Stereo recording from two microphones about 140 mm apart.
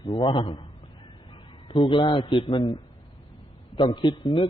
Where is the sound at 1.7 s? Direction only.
35° left (ahead or behind).